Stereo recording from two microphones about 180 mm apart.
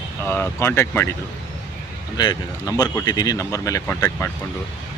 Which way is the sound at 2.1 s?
25° left (ahead or behind).